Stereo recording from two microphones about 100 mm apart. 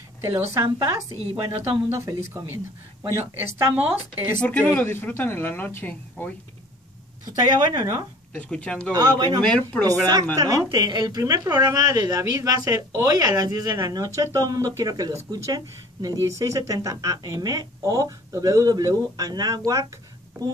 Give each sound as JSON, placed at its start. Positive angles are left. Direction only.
{"t": 0.3, "sound": "speech", "side_deg": -35}
{"t": 1.3, "sound": "a woman's voice", "side_deg": -25}
{"t": 4.4, "sound": "a woman's voice", "side_deg": 15}
{"t": 7.5, "sound": "speech", "side_deg": -45}
{"t": 8.4, "sound": "speech", "side_deg": 10}
{"t": 8.9, "sound": "speech", "side_deg": -40}
{"t": 9.6, "sound": "speech", "side_deg": 15}
{"t": 10.3, "sound": "speech", "side_deg": -35}